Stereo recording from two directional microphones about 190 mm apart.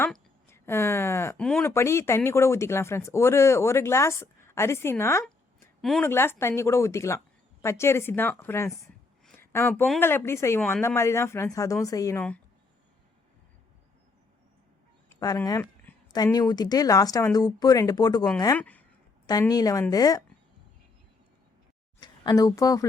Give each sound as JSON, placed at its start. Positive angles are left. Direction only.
{"t": 0.0, "sound": "speech", "side_deg": 10}
{"t": 5.8, "sound": "speech", "side_deg": 0}
{"t": 6.1, "sound": "speech", "side_deg": 10}
{"t": 9.2, "sound": "a sound", "side_deg": 10}
{"t": 10.0, "sound": "speech", "side_deg": 10}
{"t": 15.1, "sound": "speech", "side_deg": 15}
{"t": 19.3, "sound": "speech", "side_deg": 20}
{"t": 22.0, "sound": "a woman's voice", "side_deg": 20}